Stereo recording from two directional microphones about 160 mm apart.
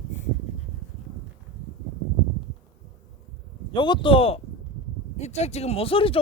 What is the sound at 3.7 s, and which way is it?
A man's voice, 30° left (ahead or behind).